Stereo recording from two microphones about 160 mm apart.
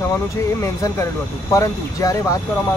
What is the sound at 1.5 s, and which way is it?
Speech, 20° left (ahead or behind).